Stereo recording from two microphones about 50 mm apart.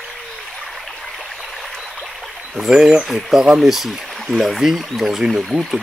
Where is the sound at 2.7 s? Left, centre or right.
Centre.